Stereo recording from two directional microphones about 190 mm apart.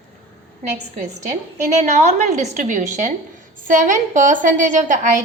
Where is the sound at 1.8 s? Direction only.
35° right (ahead or behind).